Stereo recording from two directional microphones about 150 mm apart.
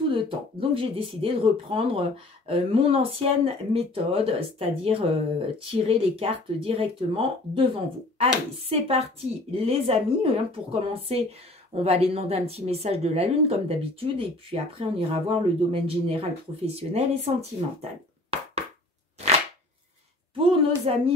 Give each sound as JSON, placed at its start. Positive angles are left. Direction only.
{"t": 0.1, "sound": "a woman's voice", "side_deg": -35}
{"t": 20.3, "sound": "a woman's voice", "side_deg": -40}